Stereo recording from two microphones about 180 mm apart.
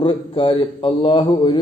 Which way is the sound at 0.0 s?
30° left (ahead or behind).